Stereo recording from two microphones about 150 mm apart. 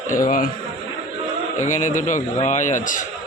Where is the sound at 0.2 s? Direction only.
65° left (ahead or behind).